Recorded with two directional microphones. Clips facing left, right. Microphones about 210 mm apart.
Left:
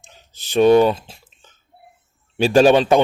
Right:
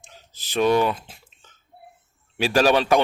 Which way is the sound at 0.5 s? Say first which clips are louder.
Left 7 dB; 30° left (ahead or behind).